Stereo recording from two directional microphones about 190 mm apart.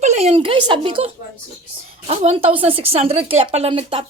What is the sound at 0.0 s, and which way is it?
A woman's voice, 35° right (ahead or behind).